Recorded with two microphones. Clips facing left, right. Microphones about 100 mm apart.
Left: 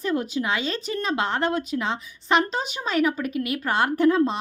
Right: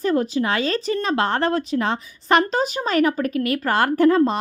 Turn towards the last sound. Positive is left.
turn(degrees=-45)  # may be behind; listen again after turning